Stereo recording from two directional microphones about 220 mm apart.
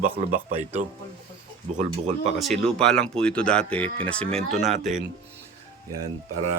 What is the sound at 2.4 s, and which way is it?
Speech, centre (ahead or behind).